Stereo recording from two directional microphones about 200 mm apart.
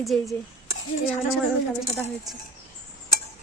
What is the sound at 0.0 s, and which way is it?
Speech, centre (ahead or behind).